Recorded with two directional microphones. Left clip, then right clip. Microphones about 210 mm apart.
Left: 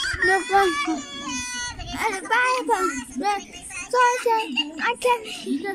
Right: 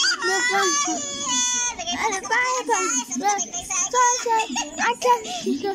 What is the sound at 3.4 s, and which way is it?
Child singing, 30° right (ahead or behind).